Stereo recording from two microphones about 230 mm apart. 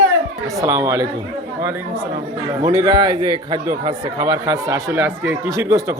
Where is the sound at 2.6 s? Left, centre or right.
Centre.